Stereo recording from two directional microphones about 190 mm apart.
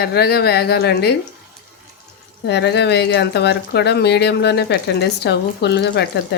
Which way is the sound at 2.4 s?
65° left (ahead or behind).